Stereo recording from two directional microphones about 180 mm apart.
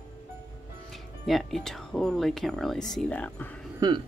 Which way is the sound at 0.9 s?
Centre (ahead or behind).